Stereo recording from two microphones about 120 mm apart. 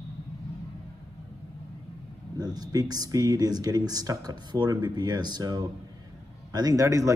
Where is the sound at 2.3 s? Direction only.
35° right (ahead or behind).